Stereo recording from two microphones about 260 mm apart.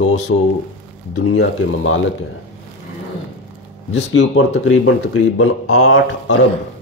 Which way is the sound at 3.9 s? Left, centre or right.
Left.